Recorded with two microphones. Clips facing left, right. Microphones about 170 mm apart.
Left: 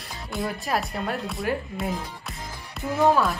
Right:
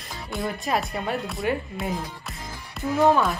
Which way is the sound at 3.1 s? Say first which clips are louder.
Left 1 dB; centre (ahead or behind).